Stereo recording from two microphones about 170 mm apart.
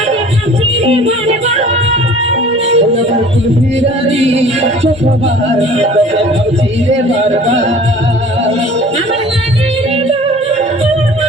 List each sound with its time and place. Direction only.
0.9 s music: 35° right (ahead or behind)
2.6 s music: 40° right (ahead or behind)